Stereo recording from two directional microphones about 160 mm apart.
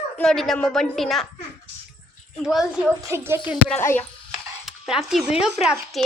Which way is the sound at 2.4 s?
5° right (ahead or behind).